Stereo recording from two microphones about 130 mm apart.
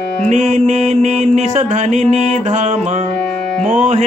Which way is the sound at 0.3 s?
60° right (ahead or behind).